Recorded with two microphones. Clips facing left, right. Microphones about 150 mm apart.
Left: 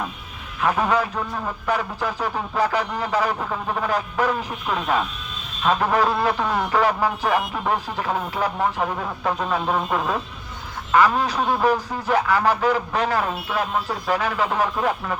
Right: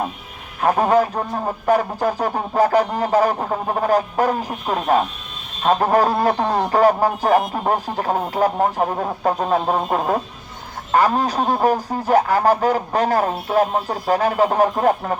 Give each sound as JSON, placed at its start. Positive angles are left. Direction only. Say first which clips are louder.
{"t": 0.6, "sound": "a man's voice", "louder": "right 5 dB", "side_deg": -40}